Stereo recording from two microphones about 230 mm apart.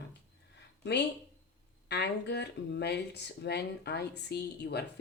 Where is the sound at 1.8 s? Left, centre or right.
Left.